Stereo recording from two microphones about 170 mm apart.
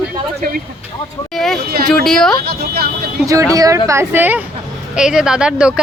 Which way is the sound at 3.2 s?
20° right (ahead or behind).